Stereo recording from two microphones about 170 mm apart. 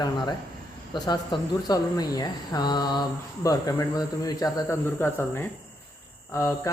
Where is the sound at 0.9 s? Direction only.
25° left (ahead or behind).